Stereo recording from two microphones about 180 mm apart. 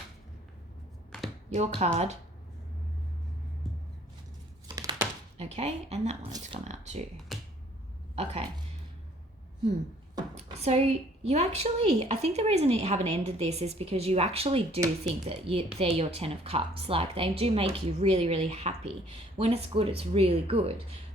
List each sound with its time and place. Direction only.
1.1 s computer keyboard: centre (ahead or behind)
1.5 s a woman's voice: 40° right (ahead or behind)
4.7 s a sound: 20° right (ahead or behind)
5.4 s a woman's voice: 35° right (ahead or behind)
7.3 s finger snapping: centre (ahead or behind)
8.1 s speech: 35° right (ahead or behind)
10.3 s a woman's voice: 35° right (ahead or behind)